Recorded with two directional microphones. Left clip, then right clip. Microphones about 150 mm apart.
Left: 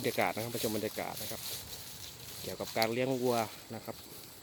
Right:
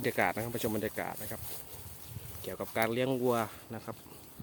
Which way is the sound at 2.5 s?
20° right (ahead or behind).